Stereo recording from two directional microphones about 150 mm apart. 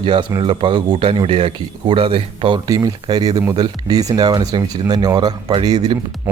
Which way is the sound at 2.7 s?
25° right (ahead or behind).